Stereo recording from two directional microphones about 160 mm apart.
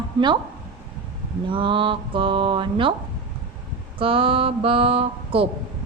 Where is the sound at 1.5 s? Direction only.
30° right (ahead or behind).